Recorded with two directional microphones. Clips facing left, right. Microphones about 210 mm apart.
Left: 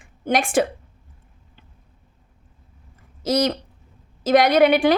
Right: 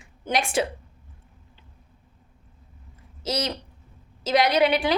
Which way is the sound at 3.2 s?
50° left (ahead or behind).